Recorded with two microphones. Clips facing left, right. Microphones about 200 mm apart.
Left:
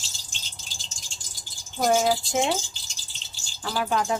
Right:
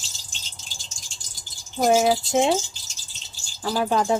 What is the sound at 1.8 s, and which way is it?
Speech, 20° right (ahead or behind).